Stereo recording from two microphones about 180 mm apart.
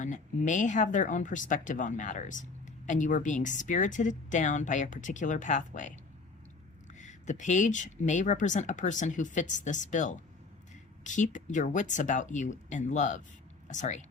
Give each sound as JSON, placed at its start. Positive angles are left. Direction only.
{"t": 0.0, "sound": "speech", "side_deg": 45}
{"t": 7.0, "sound": "speech", "side_deg": 40}